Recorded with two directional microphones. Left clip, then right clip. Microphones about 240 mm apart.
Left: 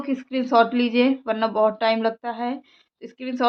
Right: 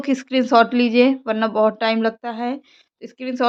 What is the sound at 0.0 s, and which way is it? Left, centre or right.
Speech, right.